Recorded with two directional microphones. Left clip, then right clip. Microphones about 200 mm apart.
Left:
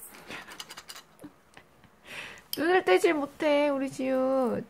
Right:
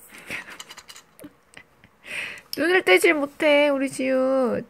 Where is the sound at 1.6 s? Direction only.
15° right (ahead or behind).